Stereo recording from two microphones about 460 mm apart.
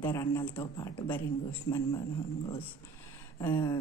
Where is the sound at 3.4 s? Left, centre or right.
Centre.